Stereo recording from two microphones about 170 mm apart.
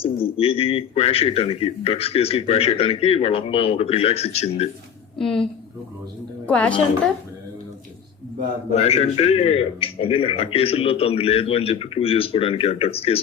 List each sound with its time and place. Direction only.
0.0 s a man's voice: 35° left (ahead or behind)
5.1 s a woman's voice: 5° left (ahead or behind)
8.7 s a man's voice: 40° left (ahead or behind)